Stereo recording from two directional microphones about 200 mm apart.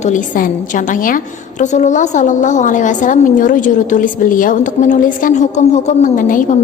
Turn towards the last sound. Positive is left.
turn(degrees=40)  # may be behind; listen again after turning